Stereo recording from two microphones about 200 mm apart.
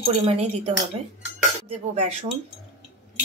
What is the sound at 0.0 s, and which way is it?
Speech, 30° right (ahead or behind).